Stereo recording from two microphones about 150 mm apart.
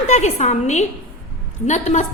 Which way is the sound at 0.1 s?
50° left (ahead or behind).